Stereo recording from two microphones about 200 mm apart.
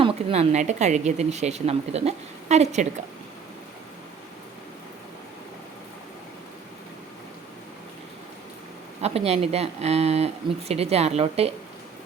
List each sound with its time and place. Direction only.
0.0 s a woman's voice: 30° right (ahead or behind)
9.0 s a woman's voice: 30° right (ahead or behind)